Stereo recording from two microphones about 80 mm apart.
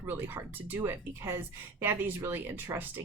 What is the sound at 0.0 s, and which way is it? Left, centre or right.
Speech, right.